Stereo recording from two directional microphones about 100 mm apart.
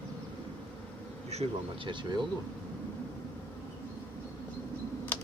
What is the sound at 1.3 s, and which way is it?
Insect, 90° right.